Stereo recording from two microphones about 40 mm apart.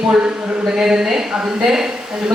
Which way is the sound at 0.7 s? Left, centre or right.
Centre.